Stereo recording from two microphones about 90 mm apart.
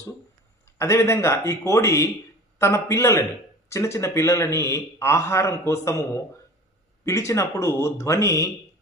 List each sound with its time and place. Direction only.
0.8 s a man's voice: 30° left (ahead or behind)